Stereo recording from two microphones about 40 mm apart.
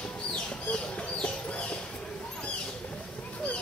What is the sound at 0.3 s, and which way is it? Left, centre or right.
Chicken, left.